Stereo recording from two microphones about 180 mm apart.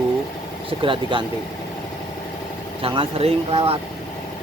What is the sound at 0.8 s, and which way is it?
Speech, 30° right (ahead or behind).